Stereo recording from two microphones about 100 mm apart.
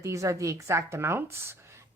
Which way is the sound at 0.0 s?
30° right (ahead or behind).